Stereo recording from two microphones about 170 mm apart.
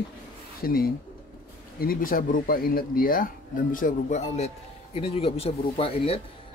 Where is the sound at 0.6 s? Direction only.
60° left (ahead or behind).